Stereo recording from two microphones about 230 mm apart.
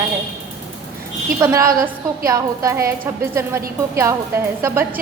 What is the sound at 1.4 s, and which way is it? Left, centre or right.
A woman's voice, centre.